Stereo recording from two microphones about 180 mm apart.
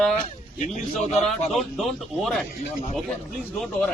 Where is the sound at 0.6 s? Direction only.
40° left (ahead or behind).